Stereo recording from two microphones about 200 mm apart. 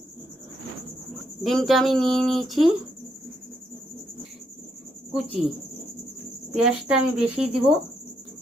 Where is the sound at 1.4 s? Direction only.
Centre (ahead or behind).